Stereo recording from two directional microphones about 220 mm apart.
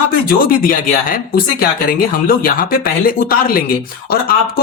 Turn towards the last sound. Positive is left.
turn(degrees=40)  # may be behind; listen again after turning